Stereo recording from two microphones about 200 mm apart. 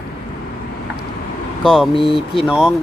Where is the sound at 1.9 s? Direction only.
25° left (ahead or behind).